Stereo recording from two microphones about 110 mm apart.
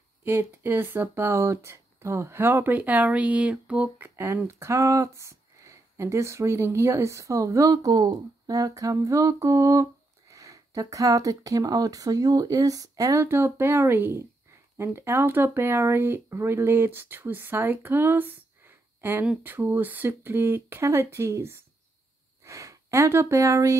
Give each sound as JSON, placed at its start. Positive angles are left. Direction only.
{"t": 0.2, "sound": "speech", "side_deg": -20}
{"t": 4.2, "sound": "speech", "side_deg": -25}